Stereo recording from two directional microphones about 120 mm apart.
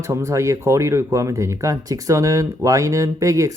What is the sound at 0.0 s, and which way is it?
Speech, 25° right (ahead or behind).